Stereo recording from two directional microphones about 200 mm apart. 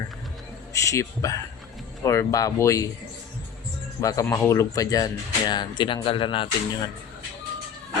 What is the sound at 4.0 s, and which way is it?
Speech, 15° left (ahead or behind).